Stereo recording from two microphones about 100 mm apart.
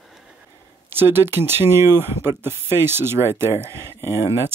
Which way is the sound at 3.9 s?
30° left (ahead or behind).